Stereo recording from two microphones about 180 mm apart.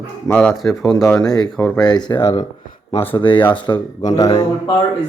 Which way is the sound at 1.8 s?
25° left (ahead or behind).